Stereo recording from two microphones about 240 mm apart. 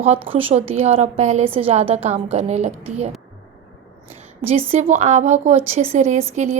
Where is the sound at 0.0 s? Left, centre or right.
Right.